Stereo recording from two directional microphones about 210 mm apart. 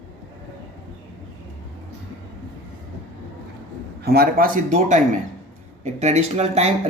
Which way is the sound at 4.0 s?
50° right (ahead or behind).